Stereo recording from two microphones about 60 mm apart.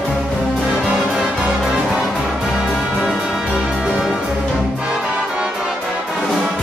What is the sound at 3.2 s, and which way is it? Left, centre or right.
Music, centre.